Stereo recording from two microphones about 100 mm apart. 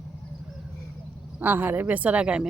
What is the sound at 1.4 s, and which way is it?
Speech, 20° right (ahead or behind).